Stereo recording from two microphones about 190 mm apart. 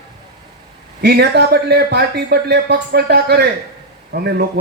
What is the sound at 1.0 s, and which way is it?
Speech, 60° right (ahead or behind).